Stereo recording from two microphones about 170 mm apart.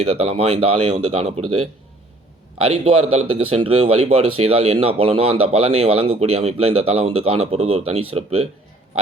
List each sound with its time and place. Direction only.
0.0 s speech: 35° right (ahead or behind)
2.8 s speech: 30° right (ahead or behind)